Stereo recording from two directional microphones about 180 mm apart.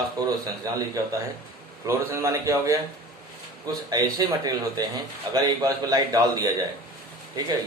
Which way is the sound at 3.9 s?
20° right (ahead or behind).